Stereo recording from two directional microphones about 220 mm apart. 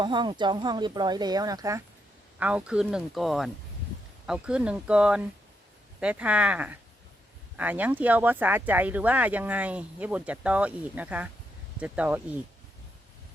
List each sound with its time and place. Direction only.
0.0 s speech: 20° right (ahead or behind)